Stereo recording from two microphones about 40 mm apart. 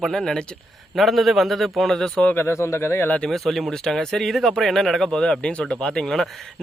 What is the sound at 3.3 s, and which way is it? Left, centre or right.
A man's voice, centre.